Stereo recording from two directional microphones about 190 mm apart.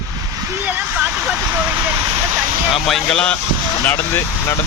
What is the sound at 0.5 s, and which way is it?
Speech, 10° right (ahead or behind).